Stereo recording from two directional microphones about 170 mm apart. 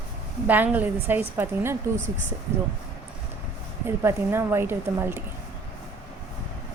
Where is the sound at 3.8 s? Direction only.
15° right (ahead or behind).